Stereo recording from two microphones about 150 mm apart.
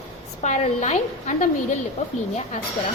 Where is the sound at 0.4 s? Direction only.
50° left (ahead or behind).